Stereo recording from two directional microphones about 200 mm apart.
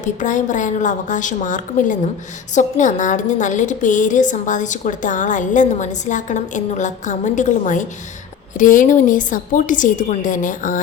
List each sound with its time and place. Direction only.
0.0 s a woman's voice: 40° left (ahead or behind)